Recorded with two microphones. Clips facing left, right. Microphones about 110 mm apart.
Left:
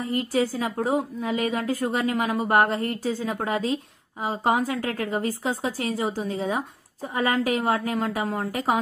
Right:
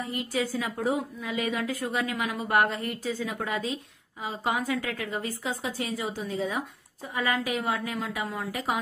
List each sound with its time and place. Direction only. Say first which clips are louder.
0.3 s a woman's voice: left 3 dB; 35° left (ahead or behind)